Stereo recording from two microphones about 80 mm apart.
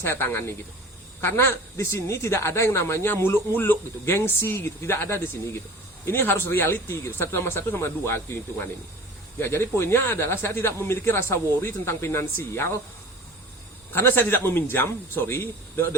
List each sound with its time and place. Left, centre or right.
0.0 s speech: left
13.9 s speech: left